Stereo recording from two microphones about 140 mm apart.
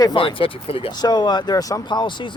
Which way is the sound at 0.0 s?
35° left (ahead or behind).